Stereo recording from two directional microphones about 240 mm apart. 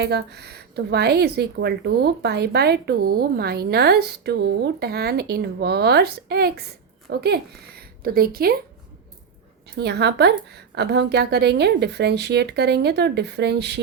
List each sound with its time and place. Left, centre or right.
0.0 s a woman's voice: right
7.8 s a sound: right
9.7 s a woman's voice: right